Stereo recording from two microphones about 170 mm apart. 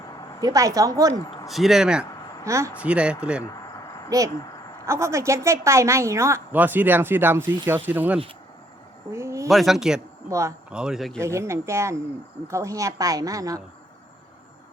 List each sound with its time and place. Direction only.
0.4 s speech: 20° right (ahead or behind)
1.5 s speech: centre (ahead or behind)
2.4 s a woman's voice: 20° right (ahead or behind)
4.1 s a woman's voice: 20° right (ahead or behind)
9.1 s a sound: 15° right (ahead or behind)
9.5 s speech: centre (ahead or behind)
10.2 s a woman's voice: 15° right (ahead or behind)
10.7 s speech: 5° right (ahead or behind)
11.2 s a woman's voice: 15° right (ahead or behind)